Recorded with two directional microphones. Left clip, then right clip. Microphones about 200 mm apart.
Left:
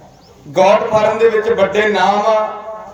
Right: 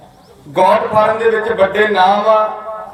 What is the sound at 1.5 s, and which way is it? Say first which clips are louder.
Speech: right 1 dB; 55° left (ahead or behind).